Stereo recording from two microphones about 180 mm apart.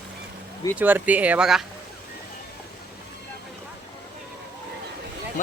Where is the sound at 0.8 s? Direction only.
10° right (ahead or behind).